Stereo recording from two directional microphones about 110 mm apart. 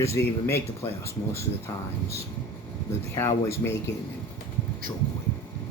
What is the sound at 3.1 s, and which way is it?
Speech, 25° left (ahead or behind).